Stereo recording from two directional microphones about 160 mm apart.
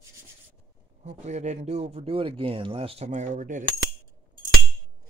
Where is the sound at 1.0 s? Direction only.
45° right (ahead or behind).